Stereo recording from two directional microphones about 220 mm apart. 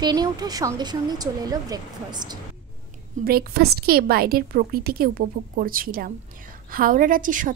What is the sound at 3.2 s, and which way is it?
A woman's voice, 45° right (ahead or behind).